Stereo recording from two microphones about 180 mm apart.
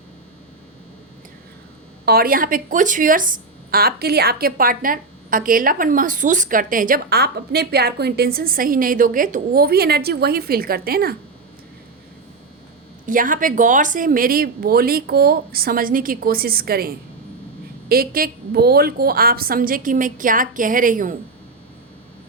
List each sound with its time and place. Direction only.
2.0 s a woman's voice: 55° right (ahead or behind)
13.1 s a woman's voice: 50° right (ahead or behind)